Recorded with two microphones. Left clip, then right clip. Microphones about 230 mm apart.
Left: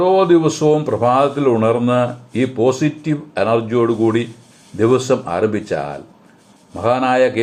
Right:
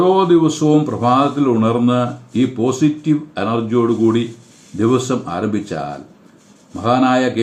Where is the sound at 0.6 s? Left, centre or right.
Left.